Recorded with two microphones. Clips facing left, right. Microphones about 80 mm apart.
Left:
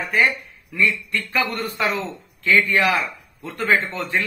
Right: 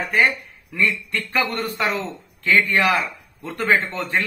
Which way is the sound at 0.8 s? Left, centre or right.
Right.